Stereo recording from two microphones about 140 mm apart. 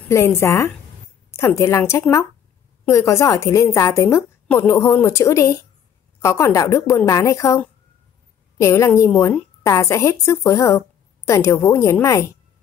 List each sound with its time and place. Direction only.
0.1 s a woman's voice: 20° left (ahead or behind)